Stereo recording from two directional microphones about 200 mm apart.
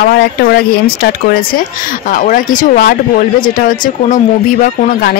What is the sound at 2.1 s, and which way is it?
A woman's voice, 45° left (ahead or behind).